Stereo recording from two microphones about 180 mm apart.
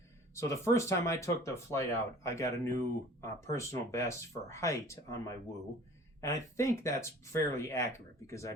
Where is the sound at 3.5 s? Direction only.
15° left (ahead or behind).